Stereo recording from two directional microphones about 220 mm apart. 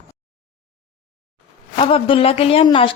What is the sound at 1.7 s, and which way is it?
A woman's voice, 25° left (ahead or behind).